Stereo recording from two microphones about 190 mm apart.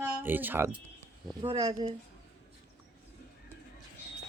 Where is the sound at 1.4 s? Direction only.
30° right (ahead or behind).